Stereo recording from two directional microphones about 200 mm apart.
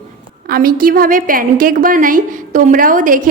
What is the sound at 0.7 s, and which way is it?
A woman's voice, 45° right (ahead or behind).